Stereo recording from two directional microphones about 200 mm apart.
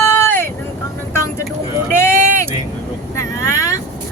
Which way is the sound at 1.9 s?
10° left (ahead or behind).